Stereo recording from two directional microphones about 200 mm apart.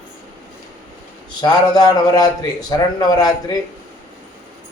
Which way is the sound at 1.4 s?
20° left (ahead or behind).